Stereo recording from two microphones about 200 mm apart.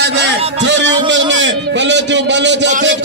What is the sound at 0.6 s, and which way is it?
A man's voice, 65° right (ahead or behind).